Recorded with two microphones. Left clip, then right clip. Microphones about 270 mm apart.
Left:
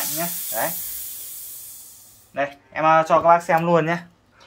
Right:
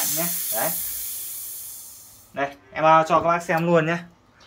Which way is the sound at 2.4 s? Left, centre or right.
Centre.